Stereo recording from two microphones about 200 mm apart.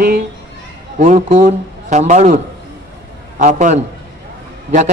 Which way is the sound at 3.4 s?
40° right (ahead or behind).